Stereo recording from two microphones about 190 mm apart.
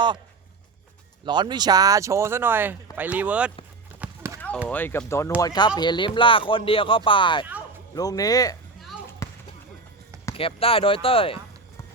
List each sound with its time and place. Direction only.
1.2 s speech: 25° right (ahead or behind); by 3.5 s 5° right (ahead or behind)
4.0 s clip-clop: 15° right (ahead or behind)
4.4 s a sound: 10° left (ahead or behind)
4.7 s speech: 10° left (ahead or behind)
9.2 s basketball bounce: 15° left (ahead or behind)
10.3 s speech: 30° left (ahead or behind)